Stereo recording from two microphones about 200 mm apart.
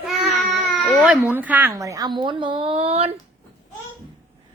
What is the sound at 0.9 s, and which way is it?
A woman's voice, 5° right (ahead or behind).